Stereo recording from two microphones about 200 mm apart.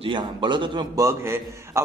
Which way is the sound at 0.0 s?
25° right (ahead or behind).